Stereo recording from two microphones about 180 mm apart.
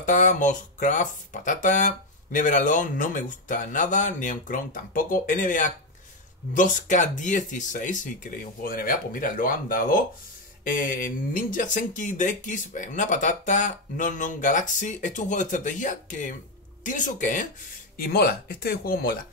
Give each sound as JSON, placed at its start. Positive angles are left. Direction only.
{"t": 0.0, "sound": "speech", "side_deg": 45}
{"t": 17.9, "sound": "speech", "side_deg": 55}